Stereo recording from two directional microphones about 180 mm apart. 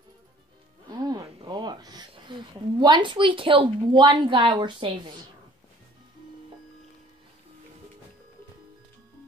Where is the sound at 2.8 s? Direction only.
25° right (ahead or behind).